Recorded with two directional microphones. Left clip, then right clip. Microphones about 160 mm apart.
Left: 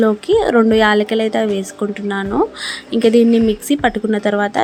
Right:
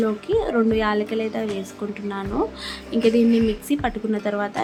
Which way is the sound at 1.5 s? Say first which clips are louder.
Left 8 dB; 40° left (ahead or behind).